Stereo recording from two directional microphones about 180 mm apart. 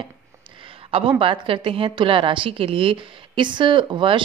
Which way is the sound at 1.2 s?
30° right (ahead or behind).